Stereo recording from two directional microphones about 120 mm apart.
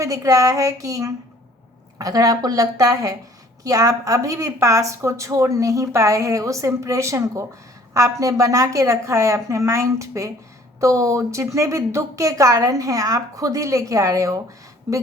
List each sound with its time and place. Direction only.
0.0 s a woman's voice: 25° right (ahead or behind)